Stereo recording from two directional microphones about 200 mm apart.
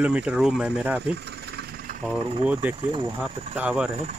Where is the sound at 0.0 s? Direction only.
5° right (ahead or behind).